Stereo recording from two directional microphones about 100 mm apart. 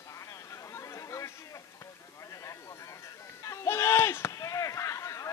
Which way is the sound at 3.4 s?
30° left (ahead or behind).